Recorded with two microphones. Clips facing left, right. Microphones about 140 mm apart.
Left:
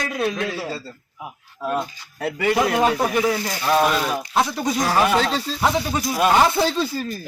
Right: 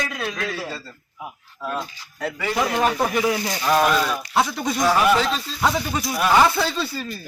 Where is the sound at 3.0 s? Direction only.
Centre (ahead or behind).